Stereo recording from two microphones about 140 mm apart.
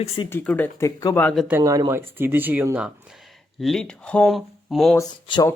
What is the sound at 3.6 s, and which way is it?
Speech, centre (ahead or behind).